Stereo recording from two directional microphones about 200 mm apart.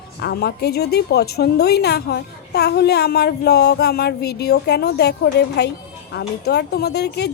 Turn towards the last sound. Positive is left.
turn(degrees=55)  # may be behind; listen again after turning